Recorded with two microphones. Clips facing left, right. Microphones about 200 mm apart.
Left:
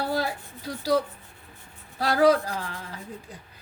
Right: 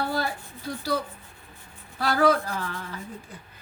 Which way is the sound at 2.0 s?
35° left (ahead or behind).